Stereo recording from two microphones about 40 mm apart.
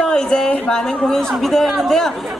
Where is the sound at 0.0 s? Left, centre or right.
Centre.